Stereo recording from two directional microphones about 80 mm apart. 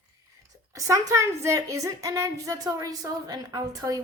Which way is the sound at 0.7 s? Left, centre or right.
Right.